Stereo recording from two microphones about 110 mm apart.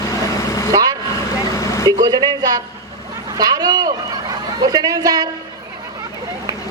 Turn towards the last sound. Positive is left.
turn(degrees=-35)  # may be behind; listen again after turning